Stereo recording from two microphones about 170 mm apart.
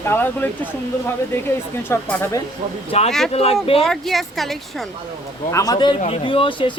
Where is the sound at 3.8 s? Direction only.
Centre (ahead or behind).